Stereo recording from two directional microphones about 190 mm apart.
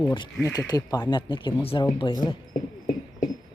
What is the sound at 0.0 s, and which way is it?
Speech, 25° left (ahead or behind).